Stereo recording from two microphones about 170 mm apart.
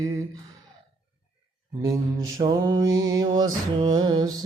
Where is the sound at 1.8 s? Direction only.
20° right (ahead or behind).